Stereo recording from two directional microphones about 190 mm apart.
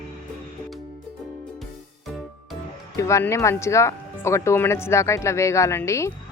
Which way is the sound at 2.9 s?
15° left (ahead or behind).